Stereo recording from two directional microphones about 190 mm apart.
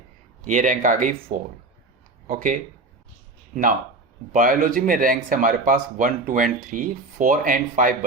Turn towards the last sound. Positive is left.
turn(degrees=-45)  # may be behind; listen again after turning